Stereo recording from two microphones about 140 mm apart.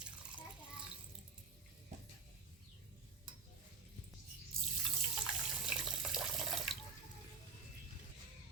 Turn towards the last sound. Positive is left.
turn(degrees=0)  # may be behind; listen again after turning